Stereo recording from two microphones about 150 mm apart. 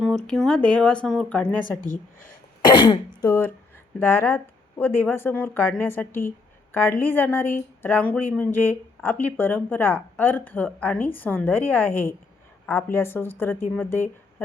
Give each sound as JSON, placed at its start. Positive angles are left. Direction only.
{"t": 0.3, "sound": "speech", "side_deg": 5}
{"t": 2.6, "sound": "cough", "side_deg": 30}
{"t": 3.2, "sound": "speech", "side_deg": 20}